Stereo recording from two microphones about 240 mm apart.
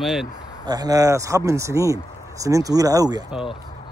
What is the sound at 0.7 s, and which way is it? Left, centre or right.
Speech, centre.